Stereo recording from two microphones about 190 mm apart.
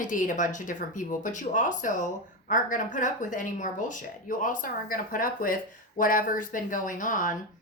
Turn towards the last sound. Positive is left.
turn(degrees=45)  # may be behind; listen again after turning